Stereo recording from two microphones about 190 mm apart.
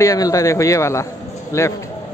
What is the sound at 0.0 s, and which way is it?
Speech, 15° left (ahead or behind).